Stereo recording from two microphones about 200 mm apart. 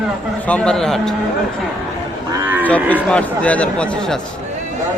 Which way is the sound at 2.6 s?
10° left (ahead or behind).